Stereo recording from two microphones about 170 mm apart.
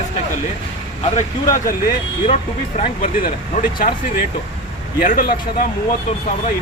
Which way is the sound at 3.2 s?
55° left (ahead or behind).